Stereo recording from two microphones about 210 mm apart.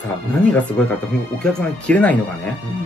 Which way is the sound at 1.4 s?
5° left (ahead or behind).